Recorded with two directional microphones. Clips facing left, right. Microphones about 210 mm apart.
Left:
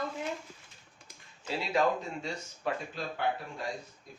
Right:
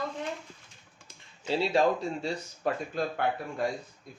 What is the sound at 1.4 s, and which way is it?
Speech, 30° right (ahead or behind).